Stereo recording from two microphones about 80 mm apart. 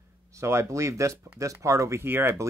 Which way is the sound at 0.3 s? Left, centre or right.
Right.